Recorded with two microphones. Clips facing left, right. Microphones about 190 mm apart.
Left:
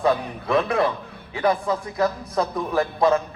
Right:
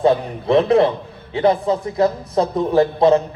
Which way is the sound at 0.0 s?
25° right (ahead or behind).